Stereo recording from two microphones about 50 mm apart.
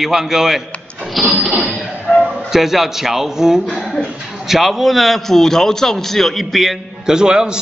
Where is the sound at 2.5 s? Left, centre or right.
Centre.